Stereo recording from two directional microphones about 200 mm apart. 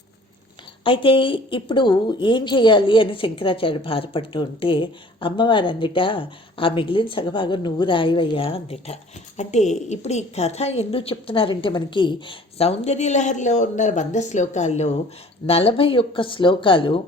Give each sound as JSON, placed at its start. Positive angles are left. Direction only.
{"t": 0.9, "sound": "a woman's voice", "side_deg": 25}